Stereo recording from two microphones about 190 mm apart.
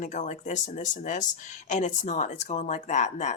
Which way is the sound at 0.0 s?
40° left (ahead or behind).